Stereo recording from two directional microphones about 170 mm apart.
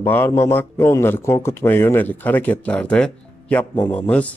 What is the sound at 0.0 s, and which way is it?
Speech, 15° left (ahead or behind).